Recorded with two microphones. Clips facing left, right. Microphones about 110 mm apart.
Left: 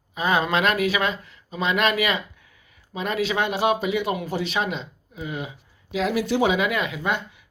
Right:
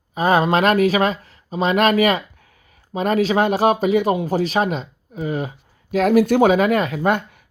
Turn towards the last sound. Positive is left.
turn(degrees=-50)  # may be behind; listen again after turning